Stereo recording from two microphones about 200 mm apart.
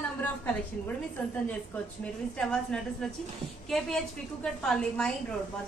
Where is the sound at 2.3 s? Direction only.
5° left (ahead or behind).